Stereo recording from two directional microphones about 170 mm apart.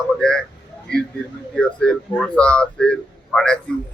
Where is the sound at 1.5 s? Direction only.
5° left (ahead or behind).